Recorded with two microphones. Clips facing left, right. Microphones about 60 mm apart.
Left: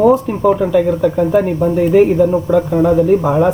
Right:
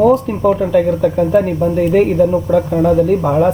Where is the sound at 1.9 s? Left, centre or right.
Centre.